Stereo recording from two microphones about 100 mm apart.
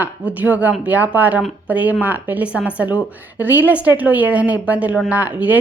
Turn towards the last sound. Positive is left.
turn(degrees=-15)  # may be behind; listen again after turning